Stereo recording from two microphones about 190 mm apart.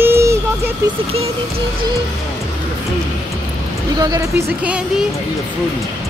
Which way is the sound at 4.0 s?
15° right (ahead or behind).